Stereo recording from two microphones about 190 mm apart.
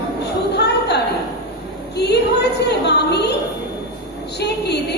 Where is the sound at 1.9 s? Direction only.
60° left (ahead or behind).